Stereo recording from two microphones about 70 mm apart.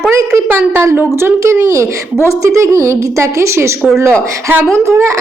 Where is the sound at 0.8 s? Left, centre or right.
Right.